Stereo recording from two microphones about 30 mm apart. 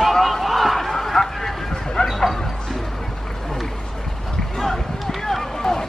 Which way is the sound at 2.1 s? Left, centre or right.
Centre.